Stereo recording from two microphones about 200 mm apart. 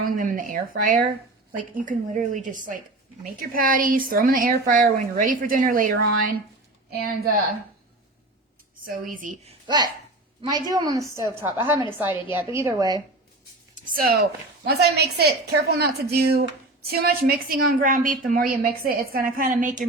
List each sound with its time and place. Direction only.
0.0 s a woman's voice: 45° right (ahead or behind)
9.0 s a woman's voice: 40° right (ahead or behind); by 13.0 s 15° right (ahead or behind)
13.7 s speech: 45° right (ahead or behind)